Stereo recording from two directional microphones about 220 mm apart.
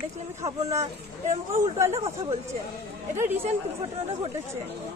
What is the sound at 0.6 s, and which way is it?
A woman's voice, 15° right (ahead or behind).